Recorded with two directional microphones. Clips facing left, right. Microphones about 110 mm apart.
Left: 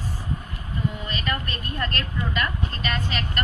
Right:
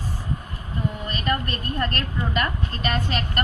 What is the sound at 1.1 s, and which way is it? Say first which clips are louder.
A woman's voice: right 3 dB; 40° right (ahead or behind).